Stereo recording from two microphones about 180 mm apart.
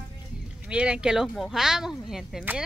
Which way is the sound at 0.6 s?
5° right (ahead or behind).